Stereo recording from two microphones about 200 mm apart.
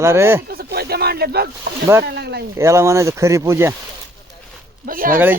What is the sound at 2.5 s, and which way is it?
Speech, 15° right (ahead or behind).